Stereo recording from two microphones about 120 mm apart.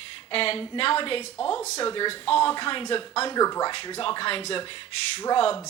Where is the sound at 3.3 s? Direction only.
30° left (ahead or behind).